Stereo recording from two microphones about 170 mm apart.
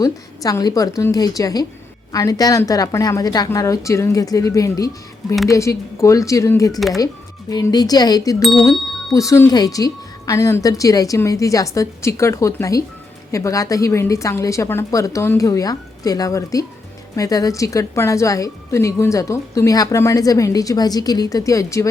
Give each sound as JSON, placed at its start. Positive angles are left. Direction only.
{"t": 0.0, "sound": "speech", "side_deg": 20}
{"t": 8.4, "sound": "speech", "side_deg": 0}
{"t": 9.1, "sound": "speech", "side_deg": 15}